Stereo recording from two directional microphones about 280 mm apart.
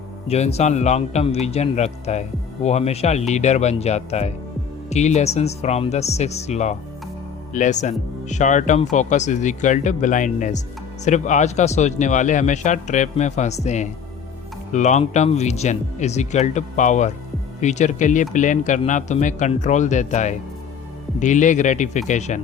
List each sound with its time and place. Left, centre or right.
0.3 s speech: left